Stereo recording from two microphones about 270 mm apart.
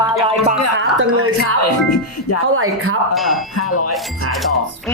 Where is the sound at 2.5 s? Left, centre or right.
Right.